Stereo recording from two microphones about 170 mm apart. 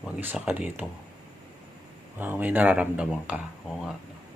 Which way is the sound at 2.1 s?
10° right (ahead or behind).